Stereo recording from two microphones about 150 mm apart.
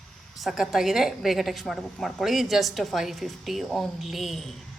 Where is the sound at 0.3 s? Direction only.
Centre (ahead or behind).